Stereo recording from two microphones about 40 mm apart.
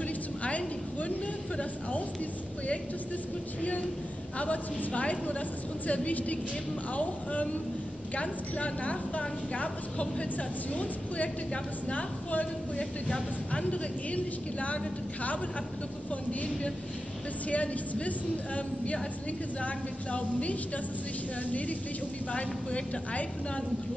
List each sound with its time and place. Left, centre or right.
0.4 s a sound: left
1.6 s speech: left
4.4 s speech: left
16.3 s speech: left
22.3 s a woman's voice: left